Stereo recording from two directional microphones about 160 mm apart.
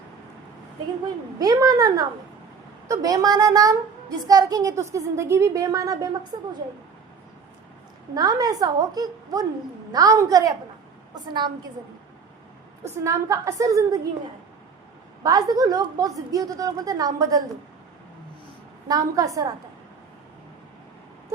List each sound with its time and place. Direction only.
1.4 s a child's voice: 25° right (ahead or behind)
8.1 s a child's voice: 25° right (ahead or behind)
13.1 s a child's voice: 20° right (ahead or behind)
15.2 s a child's voice: 25° right (ahead or behind)
18.9 s a child's voice: 20° right (ahead or behind)